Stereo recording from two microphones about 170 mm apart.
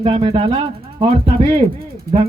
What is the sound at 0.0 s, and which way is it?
Speech, 30° right (ahead or behind).